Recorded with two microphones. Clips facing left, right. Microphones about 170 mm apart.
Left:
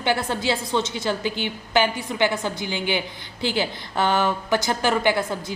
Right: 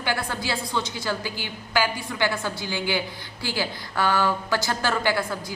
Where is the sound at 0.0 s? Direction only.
20° left (ahead or behind).